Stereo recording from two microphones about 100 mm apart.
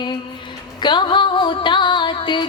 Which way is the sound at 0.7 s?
50° left (ahead or behind).